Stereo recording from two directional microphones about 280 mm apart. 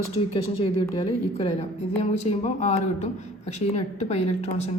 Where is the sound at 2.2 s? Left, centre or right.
Left.